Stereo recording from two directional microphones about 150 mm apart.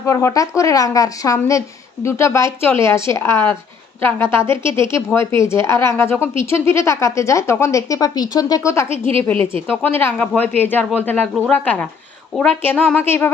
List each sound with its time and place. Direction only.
0.0 s speech: 20° left (ahead or behind)